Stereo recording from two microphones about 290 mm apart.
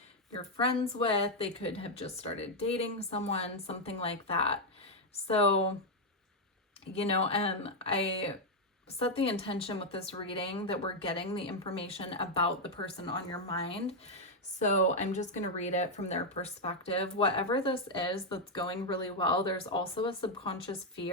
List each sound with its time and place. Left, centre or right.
0.5 s speech: centre
6.9 s speech: left